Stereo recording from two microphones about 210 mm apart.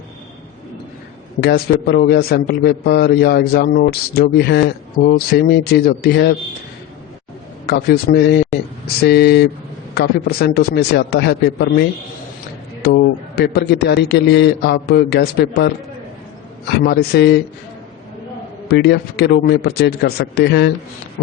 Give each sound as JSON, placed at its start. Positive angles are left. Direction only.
{"t": 1.4, "sound": "a man's voice", "side_deg": 50}
{"t": 7.7, "sound": "a man's voice", "side_deg": 50}
{"t": 12.8, "sound": "a man's voice", "side_deg": 50}
{"t": 18.7, "sound": "a man's voice", "side_deg": 50}